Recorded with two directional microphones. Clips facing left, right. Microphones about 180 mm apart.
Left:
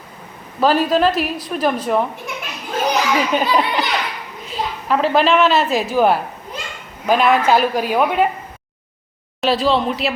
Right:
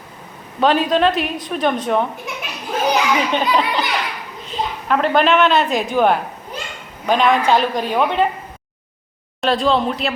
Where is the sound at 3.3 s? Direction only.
5° left (ahead or behind).